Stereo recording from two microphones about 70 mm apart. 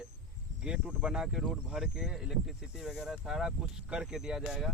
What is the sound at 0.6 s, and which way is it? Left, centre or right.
Speech, centre.